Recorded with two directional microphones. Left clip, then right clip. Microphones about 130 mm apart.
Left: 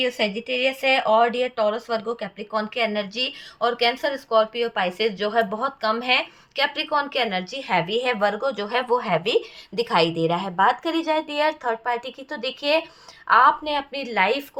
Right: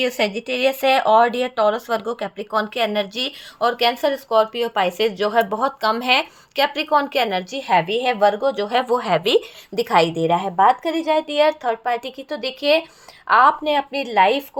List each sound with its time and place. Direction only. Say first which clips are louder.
0.3 s a woman's voice: right 3 dB; 90° right; by 14.4 s 40° right (ahead or behind)